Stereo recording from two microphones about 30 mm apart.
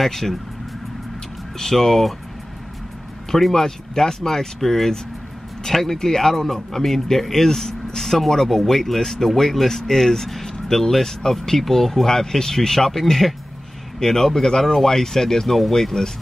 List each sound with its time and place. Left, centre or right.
0.0 s speech: centre
1.6 s speech: centre
3.3 s speech: centre
15.4 s speech: centre
15.7 s speech: centre